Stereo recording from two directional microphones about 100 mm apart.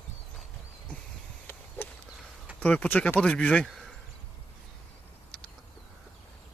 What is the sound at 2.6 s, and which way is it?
Speech, 10° left (ahead or behind).